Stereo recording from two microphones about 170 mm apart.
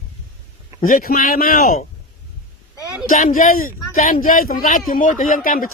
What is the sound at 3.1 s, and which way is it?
Speech, 50° left (ahead or behind).